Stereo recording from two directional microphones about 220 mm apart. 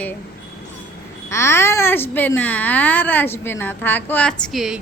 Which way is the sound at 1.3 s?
10° left (ahead or behind).